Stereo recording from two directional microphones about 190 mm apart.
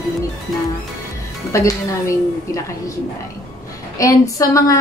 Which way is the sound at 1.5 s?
15° left (ahead or behind).